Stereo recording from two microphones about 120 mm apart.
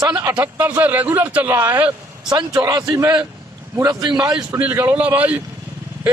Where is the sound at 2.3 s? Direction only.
30° right (ahead or behind).